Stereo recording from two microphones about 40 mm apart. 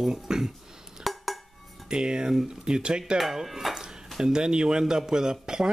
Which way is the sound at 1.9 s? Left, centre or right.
Centre.